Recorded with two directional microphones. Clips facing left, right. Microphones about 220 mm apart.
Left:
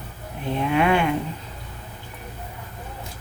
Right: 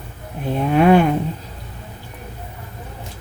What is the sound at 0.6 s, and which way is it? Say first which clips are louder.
Speech: right 7 dB; 40° right (ahead or behind).